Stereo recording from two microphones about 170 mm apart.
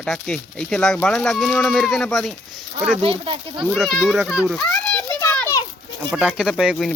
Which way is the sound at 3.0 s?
35° right (ahead or behind).